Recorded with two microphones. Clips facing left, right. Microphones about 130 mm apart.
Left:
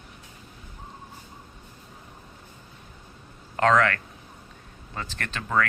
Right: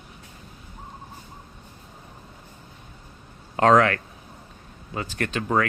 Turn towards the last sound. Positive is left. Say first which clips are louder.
# right 6 dB
turn(degrees=-15)  # may be behind; listen again after turning